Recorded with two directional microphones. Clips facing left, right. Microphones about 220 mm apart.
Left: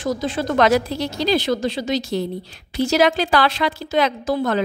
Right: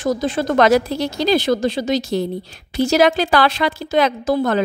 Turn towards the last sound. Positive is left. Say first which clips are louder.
# right 3 dB
turn(degrees=-50)  # may be behind; listen again after turning